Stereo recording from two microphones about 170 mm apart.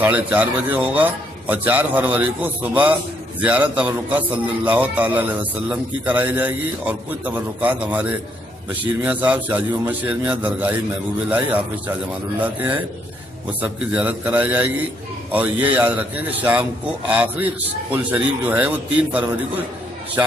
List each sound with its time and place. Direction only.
0.0 s a man's voice: 10° right (ahead or behind)